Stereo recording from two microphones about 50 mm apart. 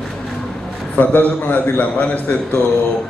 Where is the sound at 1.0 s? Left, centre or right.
Left.